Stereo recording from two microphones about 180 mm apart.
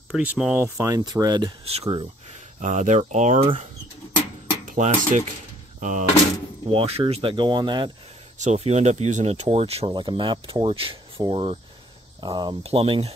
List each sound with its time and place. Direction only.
0.1 s speech: 5° right (ahead or behind)
0.7 s speech: 20° right (ahead or behind)
1.6 s speech: 35° right (ahead or behind)
2.6 s speech: 45° right (ahead or behind)
4.6 s speech: 40° right (ahead or behind)
6.7 s speech: 30° right (ahead or behind)
8.4 s speech: 40° right (ahead or behind)